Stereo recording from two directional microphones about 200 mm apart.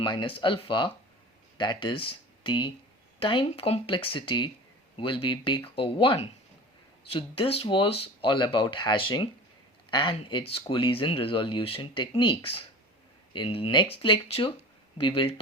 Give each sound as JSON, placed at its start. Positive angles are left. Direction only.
{"t": 0.0, "sound": "speech", "side_deg": 25}